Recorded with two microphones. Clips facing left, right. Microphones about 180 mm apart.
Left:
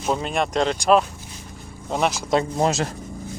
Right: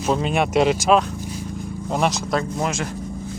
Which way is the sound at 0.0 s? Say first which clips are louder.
Right 3 dB; centre (ahead or behind).